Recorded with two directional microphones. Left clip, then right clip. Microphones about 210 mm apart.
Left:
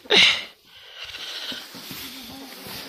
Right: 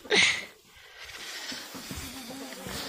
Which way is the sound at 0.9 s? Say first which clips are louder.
Left 7 dB; 20° left (ahead or behind).